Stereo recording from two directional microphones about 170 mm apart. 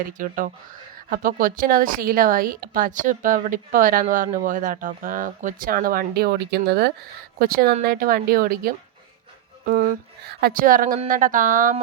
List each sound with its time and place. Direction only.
0.0 s a woman's voice: 55° right (ahead or behind)